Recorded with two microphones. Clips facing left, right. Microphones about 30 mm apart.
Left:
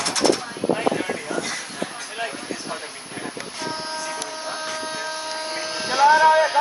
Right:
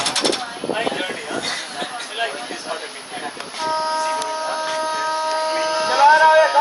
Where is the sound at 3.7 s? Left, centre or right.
Centre.